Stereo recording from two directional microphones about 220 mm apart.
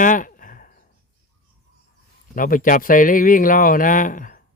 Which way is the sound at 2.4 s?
40° left (ahead or behind).